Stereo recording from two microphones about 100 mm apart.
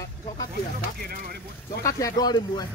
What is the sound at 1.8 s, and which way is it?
Speech, 40° left (ahead or behind).